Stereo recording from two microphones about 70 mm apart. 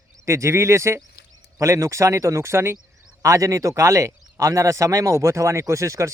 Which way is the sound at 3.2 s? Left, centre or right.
Right.